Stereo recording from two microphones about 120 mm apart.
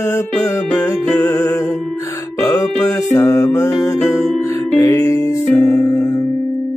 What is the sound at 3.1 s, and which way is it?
Music, 25° left (ahead or behind).